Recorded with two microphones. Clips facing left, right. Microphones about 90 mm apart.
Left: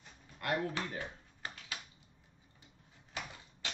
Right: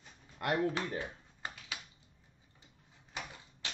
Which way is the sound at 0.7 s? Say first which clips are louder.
Right 3 dB; 20° right (ahead or behind).